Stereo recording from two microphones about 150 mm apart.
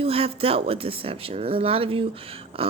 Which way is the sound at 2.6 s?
40° right (ahead or behind).